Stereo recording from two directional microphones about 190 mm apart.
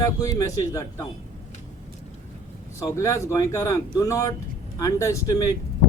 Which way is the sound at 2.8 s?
15° left (ahead or behind).